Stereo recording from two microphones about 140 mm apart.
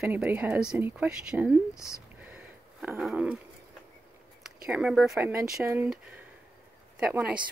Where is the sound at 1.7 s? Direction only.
20° left (ahead or behind).